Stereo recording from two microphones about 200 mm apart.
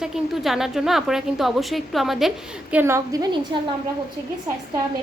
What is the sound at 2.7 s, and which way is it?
Speech, 10° right (ahead or behind).